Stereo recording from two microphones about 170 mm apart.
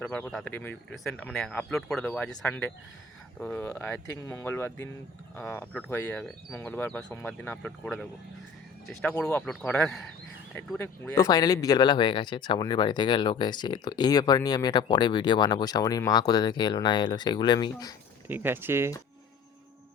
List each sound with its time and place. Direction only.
0.0 s speech: 5° left (ahead or behind)
11.1 s speech: 20° left (ahead or behind)
18.3 s speech: 10° right (ahead or behind)